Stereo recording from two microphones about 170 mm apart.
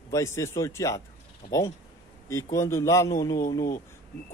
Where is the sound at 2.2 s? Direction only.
15° left (ahead or behind).